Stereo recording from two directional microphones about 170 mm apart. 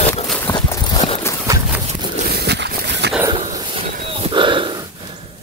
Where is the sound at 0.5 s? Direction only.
20° left (ahead or behind).